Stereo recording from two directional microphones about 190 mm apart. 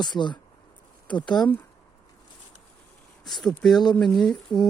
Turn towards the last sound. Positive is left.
turn(degrees=0)  # may be behind; listen again after turning